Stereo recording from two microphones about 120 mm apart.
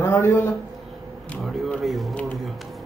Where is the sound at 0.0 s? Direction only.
25° left (ahead or behind).